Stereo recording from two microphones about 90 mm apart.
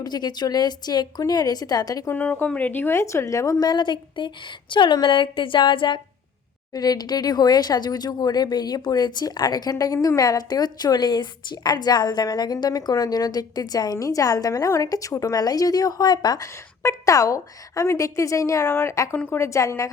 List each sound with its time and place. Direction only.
0.0 s speech: 50° left (ahead or behind)
2.0 s speech: 20° left (ahead or behind); by 3.7 s 35° left (ahead or behind)
3.7 s a woman's voice: 60° left (ahead or behind)
6.7 s speech: 45° left (ahead or behind)
16.8 s a woman's voice: 40° left (ahead or behind)
19.1 s a woman's voice: 15° left (ahead or behind)
19.4 s a woman's voice: 35° left (ahead or behind)